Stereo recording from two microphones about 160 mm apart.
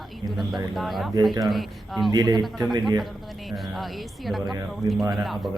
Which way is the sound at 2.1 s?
25° right (ahead or behind).